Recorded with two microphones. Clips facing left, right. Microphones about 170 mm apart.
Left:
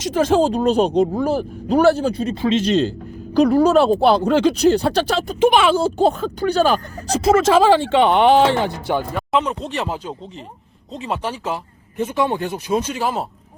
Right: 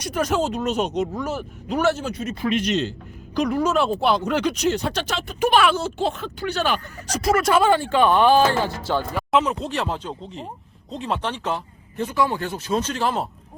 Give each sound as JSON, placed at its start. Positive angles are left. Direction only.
{"t": 0.2, "sound": "speech", "side_deg": 30}
{"t": 5.4, "sound": "speech", "side_deg": 20}
{"t": 5.7, "sound": "speech", "side_deg": 35}
{"t": 7.3, "sound": "speech", "side_deg": 25}
{"t": 9.1, "sound": "speech", "side_deg": 0}
{"t": 11.9, "sound": "speech", "side_deg": 20}